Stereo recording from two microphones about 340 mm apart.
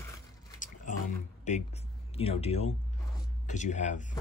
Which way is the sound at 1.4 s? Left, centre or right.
Centre.